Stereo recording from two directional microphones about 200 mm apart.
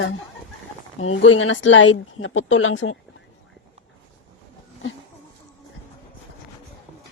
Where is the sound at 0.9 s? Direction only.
75° left (ahead or behind).